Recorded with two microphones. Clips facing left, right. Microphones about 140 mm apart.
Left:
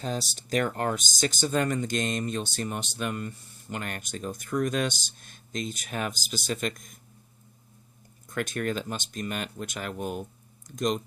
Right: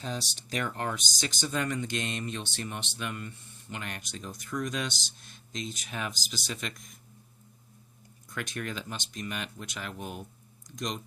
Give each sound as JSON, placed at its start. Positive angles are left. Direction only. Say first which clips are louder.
{"t": 0.0, "sound": "speech", "louder": "left 4 dB", "side_deg": 45}
{"t": 8.3, "sound": "speech", "louder": "left 7 dB", "side_deg": 50}